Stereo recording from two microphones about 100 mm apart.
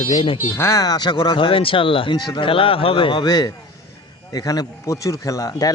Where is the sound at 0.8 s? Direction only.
40° left (ahead or behind); by 2.1 s 60° left (ahead or behind).